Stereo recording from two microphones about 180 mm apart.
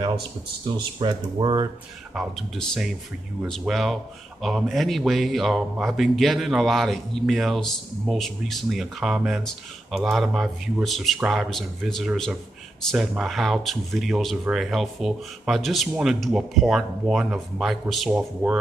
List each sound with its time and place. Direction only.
0.7 s speech: 25° right (ahead or behind)
2.1 s speech: centre (ahead or behind)